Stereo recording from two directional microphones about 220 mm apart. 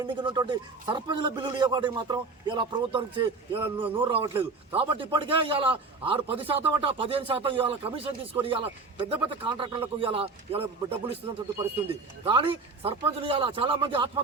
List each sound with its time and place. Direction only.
0.0 s a man's voice: 20° right (ahead or behind)
3.8 s a man's voice: 10° right (ahead or behind)
4.0 s a man's voice: 25° right (ahead or behind)
12.2 s a man's voice: 25° right (ahead or behind)